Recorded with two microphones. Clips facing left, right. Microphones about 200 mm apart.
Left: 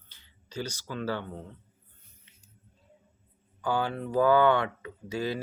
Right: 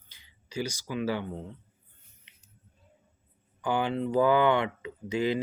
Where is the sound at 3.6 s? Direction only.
20° right (ahead or behind).